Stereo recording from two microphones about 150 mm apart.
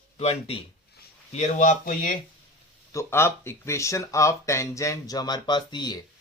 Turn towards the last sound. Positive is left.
turn(degrees=30)  # may be behind; listen again after turning